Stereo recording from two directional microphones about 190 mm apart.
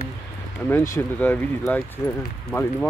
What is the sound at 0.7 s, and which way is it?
Speech, 15° left (ahead or behind).